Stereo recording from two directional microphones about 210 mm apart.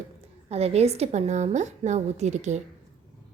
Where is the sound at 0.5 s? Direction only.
30° right (ahead or behind).